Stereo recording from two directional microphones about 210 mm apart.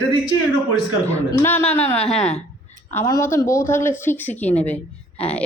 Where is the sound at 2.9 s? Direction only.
15° left (ahead or behind).